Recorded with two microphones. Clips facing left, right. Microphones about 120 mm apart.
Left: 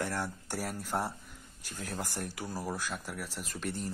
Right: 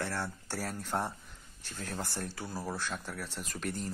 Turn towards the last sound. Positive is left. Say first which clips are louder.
# even
turn(degrees=0)  # may be behind; listen again after turning